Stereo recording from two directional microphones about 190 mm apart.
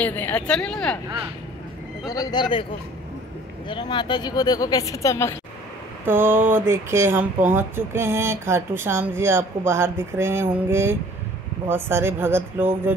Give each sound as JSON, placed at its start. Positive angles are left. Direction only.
{"t": 0.0, "sound": "speech", "side_deg": 10}
{"t": 2.0, "sound": "a woman's voice", "side_deg": 20}
{"t": 3.6, "sound": "a woman's voice", "side_deg": 25}
{"t": 6.0, "sound": "speech", "side_deg": -10}